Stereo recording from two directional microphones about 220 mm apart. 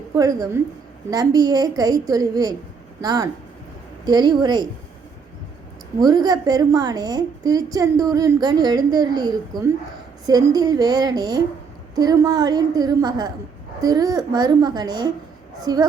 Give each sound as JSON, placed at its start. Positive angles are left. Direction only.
{"t": 0.1, "sound": "a woman's voice", "side_deg": -15}
{"t": 6.0, "sound": "a woman's voice", "side_deg": -20}